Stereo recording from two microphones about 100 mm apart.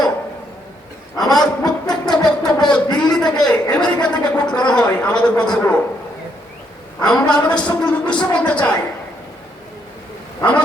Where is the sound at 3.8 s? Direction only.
45° left (ahead or behind).